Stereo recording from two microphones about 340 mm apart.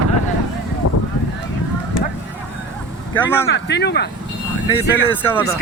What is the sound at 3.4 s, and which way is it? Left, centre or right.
Speech, left.